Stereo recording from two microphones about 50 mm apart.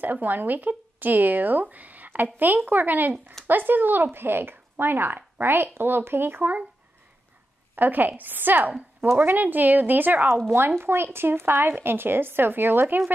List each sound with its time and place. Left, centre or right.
0.0 s speech: right
7.7 s speech: right